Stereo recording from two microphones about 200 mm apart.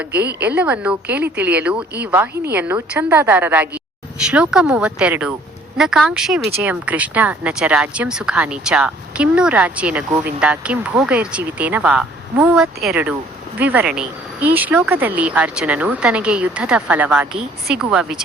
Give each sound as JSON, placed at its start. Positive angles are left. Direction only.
{"t": 0.1, "sound": "a woman's voice", "side_deg": -55}
{"t": 0.4, "sound": "speech", "side_deg": -5}